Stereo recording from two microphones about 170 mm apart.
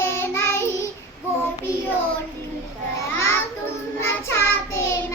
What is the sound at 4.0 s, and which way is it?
Child singing, 15° left (ahead or behind).